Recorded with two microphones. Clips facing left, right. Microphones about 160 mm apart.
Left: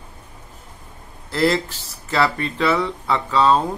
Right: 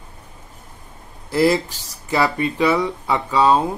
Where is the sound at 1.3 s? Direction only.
15° right (ahead or behind).